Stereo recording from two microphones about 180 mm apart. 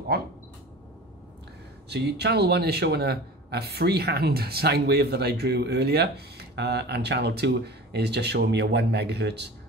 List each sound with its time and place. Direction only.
0.1 s speech: 60° right (ahead or behind)
1.9 s speech: 65° right (ahead or behind)